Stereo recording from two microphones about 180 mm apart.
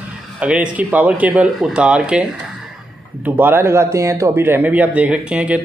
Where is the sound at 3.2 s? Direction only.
10° right (ahead or behind).